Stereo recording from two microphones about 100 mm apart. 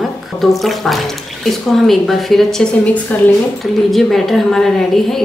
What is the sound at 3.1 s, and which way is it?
Speech, 15° left (ahead or behind).